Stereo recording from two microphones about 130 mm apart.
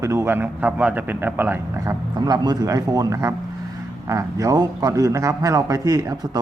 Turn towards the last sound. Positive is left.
turn(degrees=-30)  # may be behind; listen again after turning